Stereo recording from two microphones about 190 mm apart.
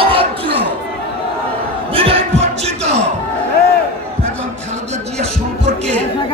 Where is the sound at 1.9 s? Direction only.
30° right (ahead or behind).